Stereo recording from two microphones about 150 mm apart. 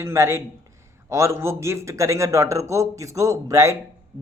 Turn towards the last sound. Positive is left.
turn(degrees=-20)  # may be behind; listen again after turning